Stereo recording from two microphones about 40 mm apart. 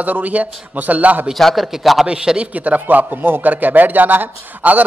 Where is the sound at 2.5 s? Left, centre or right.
Right.